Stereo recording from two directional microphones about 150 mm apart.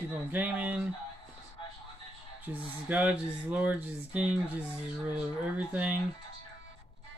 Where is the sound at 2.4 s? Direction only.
10° right (ahead or behind).